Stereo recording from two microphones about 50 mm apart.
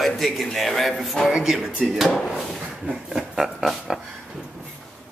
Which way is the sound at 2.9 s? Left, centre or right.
Centre.